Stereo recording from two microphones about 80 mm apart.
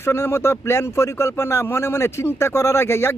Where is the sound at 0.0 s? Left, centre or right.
Left.